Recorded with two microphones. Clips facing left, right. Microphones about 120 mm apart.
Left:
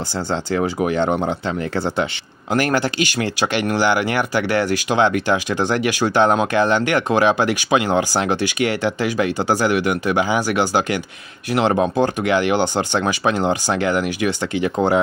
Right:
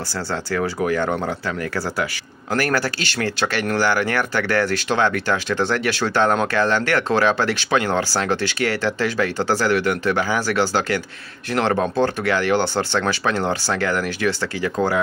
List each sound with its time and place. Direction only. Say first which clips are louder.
0.3 s speech: left 3 dB; 20° left (ahead or behind)